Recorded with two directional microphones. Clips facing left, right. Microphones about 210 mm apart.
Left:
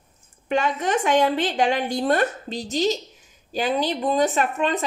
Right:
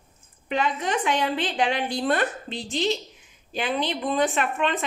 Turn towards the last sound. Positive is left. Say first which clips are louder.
# left 3 dB
turn(degrees=40)  # may be behind; listen again after turning